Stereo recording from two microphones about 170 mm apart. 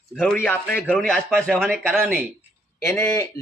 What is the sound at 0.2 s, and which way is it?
A man's voice, 5° left (ahead or behind).